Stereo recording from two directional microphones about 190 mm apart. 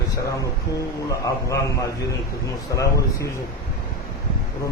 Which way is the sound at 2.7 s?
15° left (ahead or behind).